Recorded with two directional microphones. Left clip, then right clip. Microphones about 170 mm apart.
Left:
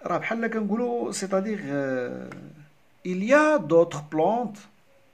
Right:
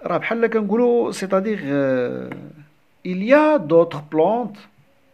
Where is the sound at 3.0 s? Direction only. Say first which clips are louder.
Right 5 dB; 15° right (ahead or behind).